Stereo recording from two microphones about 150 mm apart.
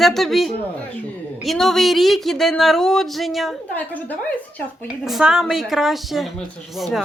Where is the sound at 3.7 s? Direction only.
10° left (ahead or behind).